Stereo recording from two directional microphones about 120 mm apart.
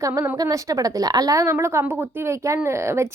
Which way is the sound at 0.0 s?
20° right (ahead or behind).